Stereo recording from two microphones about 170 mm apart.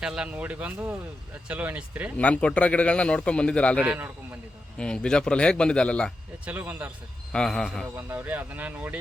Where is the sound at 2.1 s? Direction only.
5° left (ahead or behind).